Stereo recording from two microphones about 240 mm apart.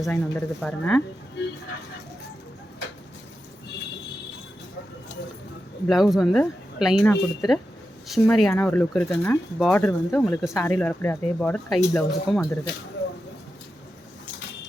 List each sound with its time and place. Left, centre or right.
0.0 s speech: centre
1.4 s vehicle: left
5.9 s speech: centre